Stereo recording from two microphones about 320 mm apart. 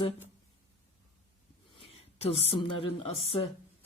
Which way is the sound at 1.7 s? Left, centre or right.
Centre.